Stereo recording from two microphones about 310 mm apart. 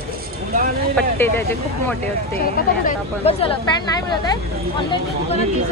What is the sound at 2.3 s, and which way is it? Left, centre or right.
Speech, left.